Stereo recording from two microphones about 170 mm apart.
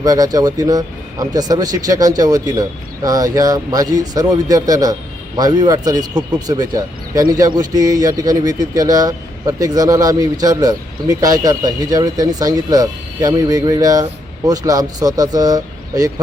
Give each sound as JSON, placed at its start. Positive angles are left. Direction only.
{"t": 0.0, "sound": "speech", "side_deg": -20}